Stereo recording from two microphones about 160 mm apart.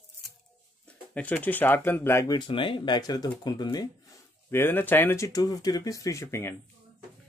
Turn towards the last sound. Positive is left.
turn(degrees=15)  # may be behind; listen again after turning